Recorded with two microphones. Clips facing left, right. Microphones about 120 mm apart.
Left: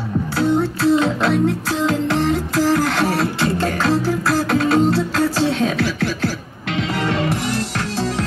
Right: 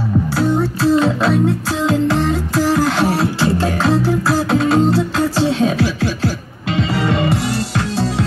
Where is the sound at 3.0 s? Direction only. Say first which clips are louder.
Right 2 dB; 5° right (ahead or behind).